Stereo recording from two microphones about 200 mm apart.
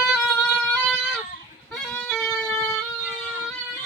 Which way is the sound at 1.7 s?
5° left (ahead or behind).